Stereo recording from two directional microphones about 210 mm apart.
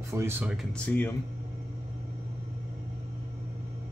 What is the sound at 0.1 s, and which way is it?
Speech, 10° right (ahead or behind).